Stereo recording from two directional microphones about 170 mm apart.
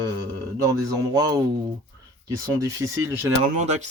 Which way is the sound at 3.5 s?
45° right (ahead or behind).